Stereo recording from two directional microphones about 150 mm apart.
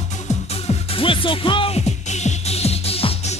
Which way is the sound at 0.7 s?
35° left (ahead or behind).